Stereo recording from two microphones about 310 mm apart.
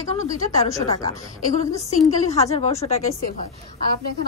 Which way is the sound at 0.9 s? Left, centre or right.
Centre.